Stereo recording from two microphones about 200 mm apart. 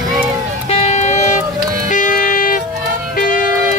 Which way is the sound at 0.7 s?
35° left (ahead or behind).